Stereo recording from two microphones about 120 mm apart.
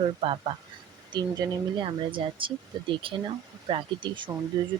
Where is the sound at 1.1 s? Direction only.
40° right (ahead or behind).